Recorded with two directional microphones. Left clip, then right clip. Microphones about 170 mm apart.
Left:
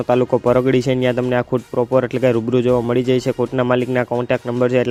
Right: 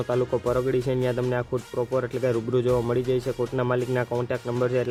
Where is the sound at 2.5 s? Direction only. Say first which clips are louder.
Left 7 dB; 30° left (ahead or behind).